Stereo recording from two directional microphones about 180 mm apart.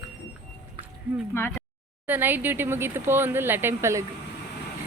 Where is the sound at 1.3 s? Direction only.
15° left (ahead or behind).